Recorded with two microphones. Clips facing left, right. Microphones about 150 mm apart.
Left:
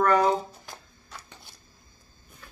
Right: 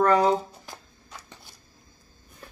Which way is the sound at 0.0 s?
30° right (ahead or behind).